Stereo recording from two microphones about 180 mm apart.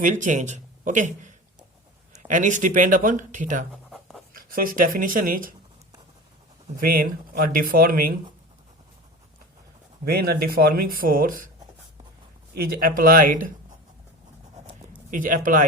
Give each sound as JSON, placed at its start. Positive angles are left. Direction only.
{"t": 0.0, "sound": "speech", "side_deg": -45}
{"t": 3.8, "sound": "writing", "side_deg": 0}
{"t": 4.4, "sound": "speech", "side_deg": -55}
{"t": 6.7, "sound": "speech", "side_deg": -50}
{"t": 10.1, "sound": "speech", "side_deg": -55}
{"t": 12.5, "sound": "speech", "side_deg": -55}
{"t": 15.1, "sound": "speech", "side_deg": -50}